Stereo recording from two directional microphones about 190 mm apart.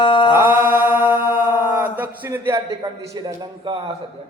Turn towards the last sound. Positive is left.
turn(degrees=-25)  # may be behind; listen again after turning